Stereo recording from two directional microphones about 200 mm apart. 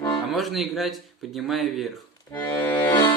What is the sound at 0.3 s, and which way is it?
Speech, centre (ahead or behind).